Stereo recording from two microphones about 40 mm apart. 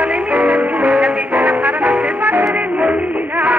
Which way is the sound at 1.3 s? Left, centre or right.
Right.